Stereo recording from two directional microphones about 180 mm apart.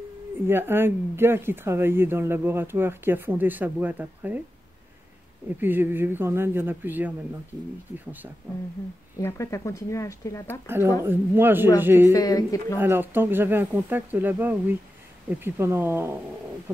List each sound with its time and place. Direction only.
0.5 s speech: 10° right (ahead or behind)
5.6 s speech: 10° right (ahead or behind)
9.2 s speech: 15° left (ahead or behind)
11.1 s speech: 10° right (ahead or behind)
12.1 s speech: 20° left (ahead or behind)
12.7 s speech: 10° right (ahead or behind)